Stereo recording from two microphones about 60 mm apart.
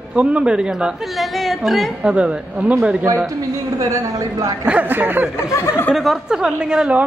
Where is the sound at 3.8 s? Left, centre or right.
Right.